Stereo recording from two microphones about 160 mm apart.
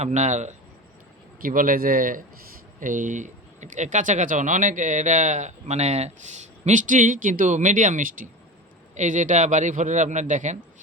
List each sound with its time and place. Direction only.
0.0 s speech: 45° right (ahead or behind)
1.4 s speech: 60° right (ahead or behind)